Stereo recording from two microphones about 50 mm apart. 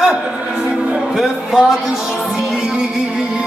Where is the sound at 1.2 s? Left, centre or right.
Centre.